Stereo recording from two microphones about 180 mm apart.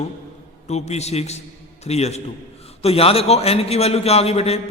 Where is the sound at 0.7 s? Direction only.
35° left (ahead or behind).